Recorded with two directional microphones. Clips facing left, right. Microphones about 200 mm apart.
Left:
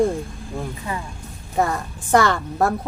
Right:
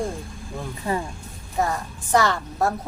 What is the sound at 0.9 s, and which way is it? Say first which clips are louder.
Speech: right 6 dB; 35° right (ahead or behind).